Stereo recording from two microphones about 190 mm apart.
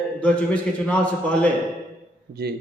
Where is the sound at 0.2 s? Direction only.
5° left (ahead or behind).